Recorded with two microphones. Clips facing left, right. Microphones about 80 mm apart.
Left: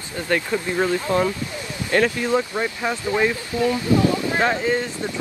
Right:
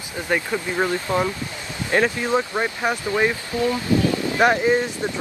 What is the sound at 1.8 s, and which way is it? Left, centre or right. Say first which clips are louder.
Speech: left 1 dB; right.